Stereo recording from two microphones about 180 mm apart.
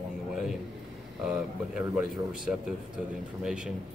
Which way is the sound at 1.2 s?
5° right (ahead or behind).